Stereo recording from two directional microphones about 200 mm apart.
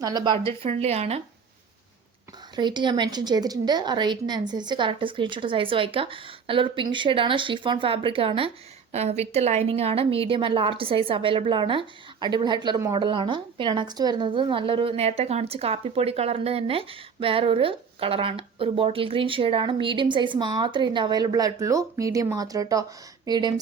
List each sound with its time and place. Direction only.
0.0 s a woman's voice: 20° right (ahead or behind)
2.6 s a woman's voice: 20° right (ahead or behind)